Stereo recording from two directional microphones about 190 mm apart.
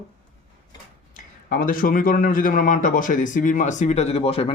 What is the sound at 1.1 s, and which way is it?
A man's voice, 50° left (ahead or behind).